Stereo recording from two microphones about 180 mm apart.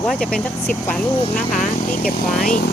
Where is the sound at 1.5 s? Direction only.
45° left (ahead or behind).